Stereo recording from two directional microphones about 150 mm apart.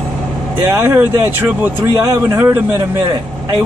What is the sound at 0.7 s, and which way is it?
Speech, 15° right (ahead or behind).